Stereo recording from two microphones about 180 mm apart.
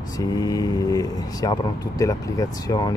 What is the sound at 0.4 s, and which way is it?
Speech, 20° left (ahead or behind).